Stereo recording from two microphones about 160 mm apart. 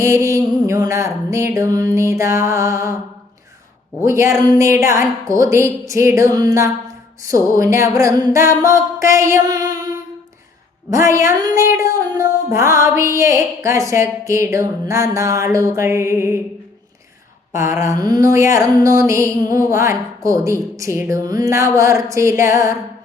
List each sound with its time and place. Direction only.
0.0 s music: 20° right (ahead or behind)
4.0 s music: 15° right (ahead or behind)
11.0 s music: 20° right (ahead or behind)
17.7 s music: 20° right (ahead or behind)